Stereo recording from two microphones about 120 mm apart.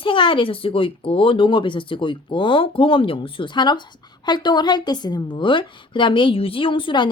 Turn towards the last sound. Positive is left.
turn(degrees=40)  # may be behind; listen again after turning